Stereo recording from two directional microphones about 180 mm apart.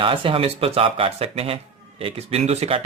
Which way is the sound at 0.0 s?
30° right (ahead or behind).